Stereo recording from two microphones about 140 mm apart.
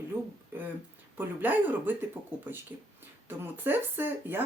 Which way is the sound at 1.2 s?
15° right (ahead or behind).